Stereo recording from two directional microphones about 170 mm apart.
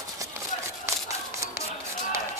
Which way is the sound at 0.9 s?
15° right (ahead or behind).